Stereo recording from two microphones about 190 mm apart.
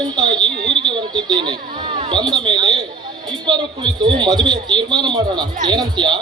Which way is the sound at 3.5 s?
25° right (ahead or behind).